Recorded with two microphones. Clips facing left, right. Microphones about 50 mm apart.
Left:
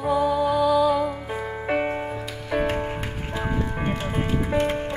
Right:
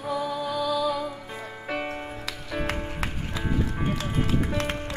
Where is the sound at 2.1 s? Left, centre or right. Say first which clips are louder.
Left 6 dB; left.